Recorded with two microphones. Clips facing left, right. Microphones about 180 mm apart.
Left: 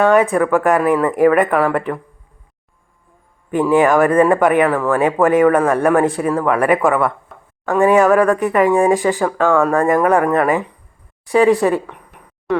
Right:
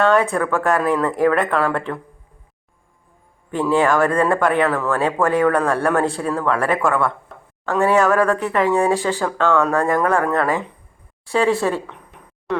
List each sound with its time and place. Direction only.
0.0 s speech: 15° left (ahead or behind)
3.5 s speech: 15° left (ahead or behind)
12.5 s speech: centre (ahead or behind)